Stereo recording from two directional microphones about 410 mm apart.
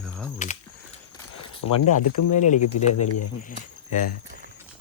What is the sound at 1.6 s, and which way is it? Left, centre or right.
Speech, left.